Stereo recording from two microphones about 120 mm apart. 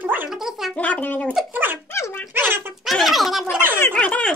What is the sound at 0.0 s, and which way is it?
Gargling, 15° right (ahead or behind).